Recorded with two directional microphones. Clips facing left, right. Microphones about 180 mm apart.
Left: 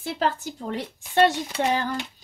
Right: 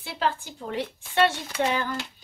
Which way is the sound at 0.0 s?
45° left (ahead or behind).